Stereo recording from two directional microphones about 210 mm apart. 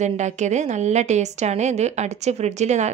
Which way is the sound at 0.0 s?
35° right (ahead or behind).